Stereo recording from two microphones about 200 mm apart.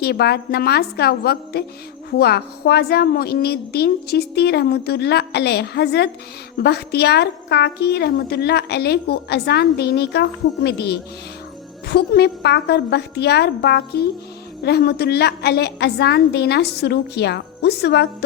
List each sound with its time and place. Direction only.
0.0 s a woman's voice: 55° left (ahead or behind)